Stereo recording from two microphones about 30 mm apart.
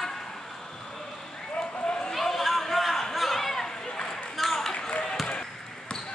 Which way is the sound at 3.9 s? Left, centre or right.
Left.